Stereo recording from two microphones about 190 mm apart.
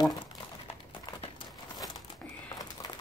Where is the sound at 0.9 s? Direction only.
25° left (ahead or behind).